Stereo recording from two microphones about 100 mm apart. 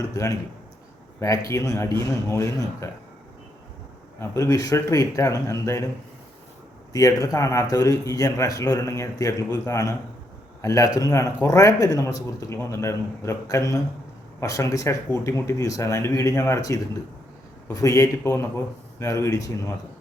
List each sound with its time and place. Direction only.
0.1 s a man's voice: 35° left (ahead or behind)
4.2 s a man's voice: 30° left (ahead or behind)
6.9 s a man's voice: 35° left (ahead or behind)